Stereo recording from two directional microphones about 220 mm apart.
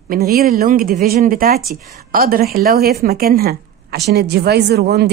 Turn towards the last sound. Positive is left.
turn(degrees=-45)  # may be behind; listen again after turning